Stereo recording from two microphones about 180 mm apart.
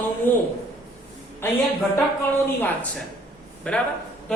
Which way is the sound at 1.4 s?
10° left (ahead or behind).